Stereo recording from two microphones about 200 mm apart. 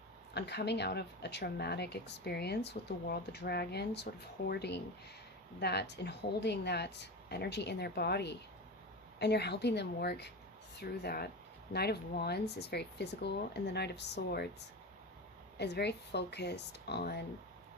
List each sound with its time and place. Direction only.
0.3 s speech: 55° left (ahead or behind)
15.5 s speech: 55° left (ahead or behind)